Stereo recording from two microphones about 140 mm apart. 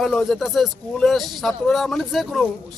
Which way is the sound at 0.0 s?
Centre (ahead or behind).